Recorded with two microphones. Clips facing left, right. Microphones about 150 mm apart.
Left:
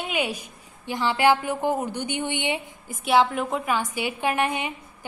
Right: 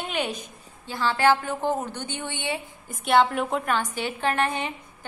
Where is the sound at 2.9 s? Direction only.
Centre (ahead or behind).